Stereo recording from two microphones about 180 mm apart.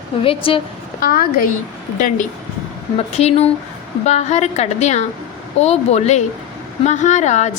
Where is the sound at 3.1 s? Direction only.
35° left (ahead or behind).